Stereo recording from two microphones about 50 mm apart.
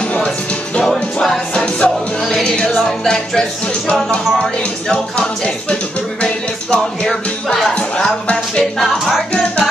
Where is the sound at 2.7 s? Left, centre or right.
Centre.